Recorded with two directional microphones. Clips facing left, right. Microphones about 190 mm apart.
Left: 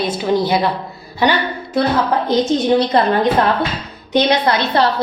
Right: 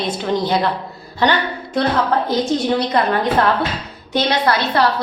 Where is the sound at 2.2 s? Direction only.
20° left (ahead or behind).